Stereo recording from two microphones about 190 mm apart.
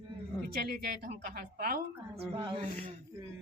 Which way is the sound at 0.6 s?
55° right (ahead or behind).